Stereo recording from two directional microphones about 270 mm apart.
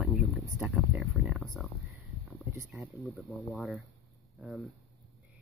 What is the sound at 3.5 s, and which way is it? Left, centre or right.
Speech, centre.